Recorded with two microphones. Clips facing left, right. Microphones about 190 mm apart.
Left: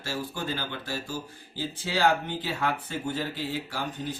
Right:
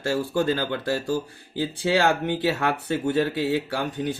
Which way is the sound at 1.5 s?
60° right (ahead or behind).